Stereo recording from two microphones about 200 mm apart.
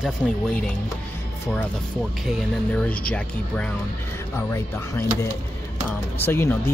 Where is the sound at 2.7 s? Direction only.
5° left (ahead or behind).